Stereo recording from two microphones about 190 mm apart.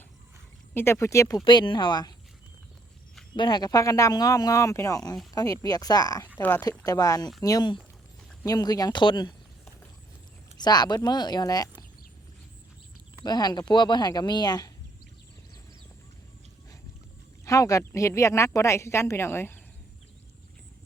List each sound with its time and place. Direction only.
0.7 s speech: 10° left (ahead or behind)
3.3 s speech: 25° left (ahead or behind)
10.6 s speech: 20° left (ahead or behind)
13.2 s speech: 20° left (ahead or behind)
17.4 s speech: 15° left (ahead or behind)